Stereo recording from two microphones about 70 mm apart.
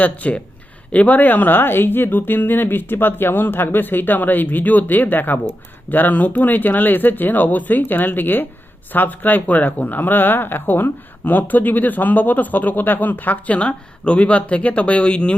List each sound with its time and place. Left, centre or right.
0.0 s speech: left